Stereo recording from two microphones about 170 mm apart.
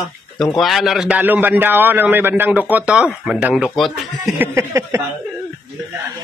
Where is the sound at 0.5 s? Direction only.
Centre (ahead or behind).